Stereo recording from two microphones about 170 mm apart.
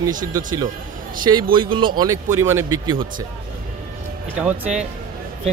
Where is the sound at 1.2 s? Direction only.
25° right (ahead or behind).